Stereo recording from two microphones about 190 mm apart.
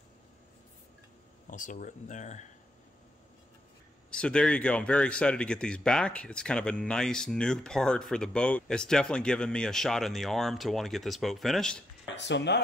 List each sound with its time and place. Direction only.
1.5 s speech: 45° left (ahead or behind)
4.1 s speech: 5° left (ahead or behind)
12.2 s speech: 70° left (ahead or behind)